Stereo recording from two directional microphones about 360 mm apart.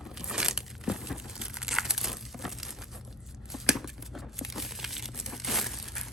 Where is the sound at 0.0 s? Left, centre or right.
Centre.